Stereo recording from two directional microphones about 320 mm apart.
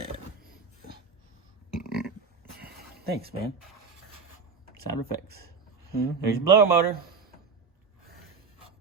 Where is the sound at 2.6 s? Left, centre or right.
Right.